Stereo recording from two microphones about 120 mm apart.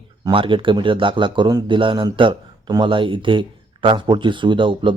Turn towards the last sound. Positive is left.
turn(degrees=-45)  # may be behind; listen again after turning